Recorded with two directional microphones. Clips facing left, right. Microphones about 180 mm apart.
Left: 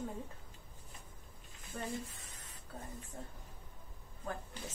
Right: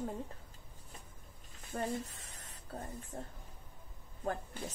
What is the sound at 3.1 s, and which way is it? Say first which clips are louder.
Speech: right 4 dB; 30° right (ahead or behind).